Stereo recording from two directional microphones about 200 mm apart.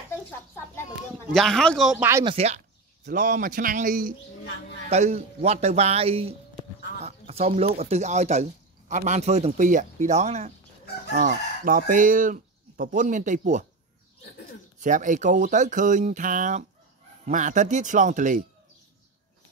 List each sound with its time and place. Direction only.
1.3 s speech: centre (ahead or behind)
2.2 s speech: 30° right (ahead or behind)
11.1 s speech: 45° right (ahead or behind)
14.8 s speech: 40° right (ahead or behind)